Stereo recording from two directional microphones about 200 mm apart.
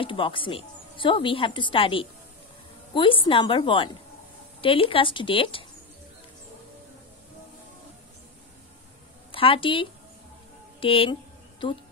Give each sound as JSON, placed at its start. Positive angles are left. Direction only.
{"t": 0.0, "sound": "a woman's voice", "side_deg": 25}
{"t": 9.3, "sound": "a woman's voice", "side_deg": 25}